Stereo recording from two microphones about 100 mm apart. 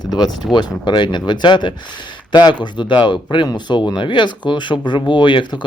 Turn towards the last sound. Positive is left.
turn(degrees=55)  # may be behind; listen again after turning